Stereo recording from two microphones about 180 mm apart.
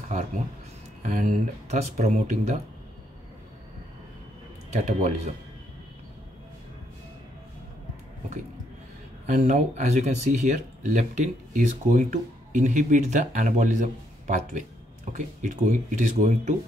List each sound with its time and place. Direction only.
1.0 s speech: 40° right (ahead or behind)
4.7 s speech: 40° right (ahead or behind)
9.2 s speech: 40° right (ahead or behind)